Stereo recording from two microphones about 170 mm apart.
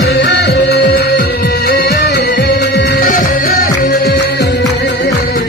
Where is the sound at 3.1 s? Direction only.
55° left (ahead or behind).